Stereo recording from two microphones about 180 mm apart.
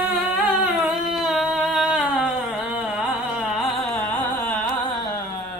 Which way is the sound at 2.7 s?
5° right (ahead or behind).